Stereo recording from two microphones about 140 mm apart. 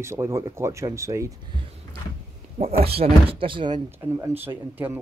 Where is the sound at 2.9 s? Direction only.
45° right (ahead or behind).